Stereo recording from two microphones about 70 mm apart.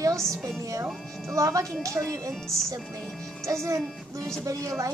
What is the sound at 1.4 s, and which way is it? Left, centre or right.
Speech, right.